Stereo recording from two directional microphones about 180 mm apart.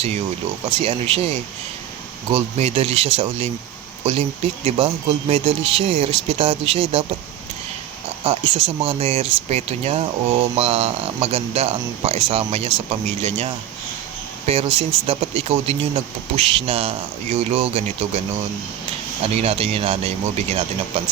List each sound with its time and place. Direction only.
0.8 s speech: 30° right (ahead or behind)
2.3 s speech: 35° right (ahead or behind)
4.6 s speech: 35° right (ahead or behind)
8.2 s speech: 30° right (ahead or behind)
19.4 s speech: 35° right (ahead or behind)